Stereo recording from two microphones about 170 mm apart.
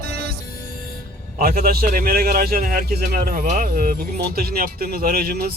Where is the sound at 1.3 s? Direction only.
60° right (ahead or behind).